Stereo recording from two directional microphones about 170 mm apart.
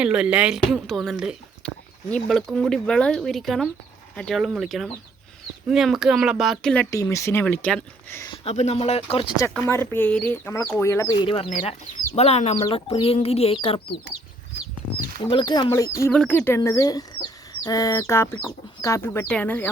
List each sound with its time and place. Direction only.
0.0 s speech: 5° right (ahead or behind)
6.9 s speech: 20° left (ahead or behind)
8.4 s speech: 40° left (ahead or behind)
9.4 s speech: 15° left (ahead or behind)
11.6 s speech: 35° left (ahead or behind)
15.2 s speech: 25° left (ahead or behind); by 19.7 s 10° left (ahead or behind)